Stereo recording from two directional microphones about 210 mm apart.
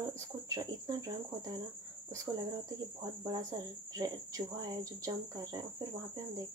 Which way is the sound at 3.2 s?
15° right (ahead or behind).